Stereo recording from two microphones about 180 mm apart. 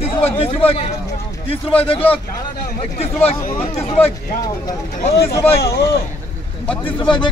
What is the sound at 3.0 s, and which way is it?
Speech, 35° left (ahead or behind).